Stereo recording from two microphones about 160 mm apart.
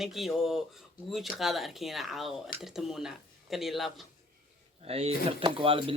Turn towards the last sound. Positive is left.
turn(degrees=-35)  # may be behind; listen again after turning